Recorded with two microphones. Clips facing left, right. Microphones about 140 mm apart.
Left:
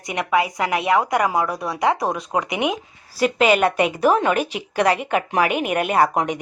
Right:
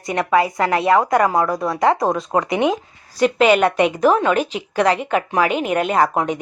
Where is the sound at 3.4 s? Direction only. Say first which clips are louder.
Right 2 dB; 40° right (ahead or behind).